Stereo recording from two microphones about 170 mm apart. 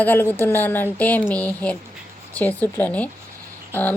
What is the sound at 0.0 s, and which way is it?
Speech, 10° left (ahead or behind).